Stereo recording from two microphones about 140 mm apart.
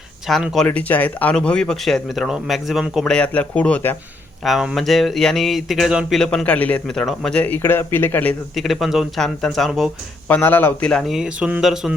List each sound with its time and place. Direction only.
0.3 s speech: centre (ahead or behind)
4.4 s speech: centre (ahead or behind)
8.5 s speech: centre (ahead or behind)
10.2 s speech: 10° left (ahead or behind)
11.1 s speech: 5° right (ahead or behind)